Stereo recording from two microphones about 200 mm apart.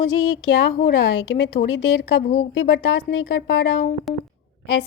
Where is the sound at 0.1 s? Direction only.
70° left (ahead or behind).